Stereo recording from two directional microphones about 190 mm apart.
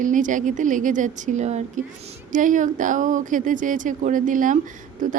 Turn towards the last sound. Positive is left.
turn(degrees=-45)  # may be behind; listen again after turning